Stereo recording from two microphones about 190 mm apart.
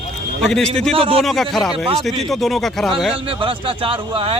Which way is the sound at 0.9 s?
30° right (ahead or behind).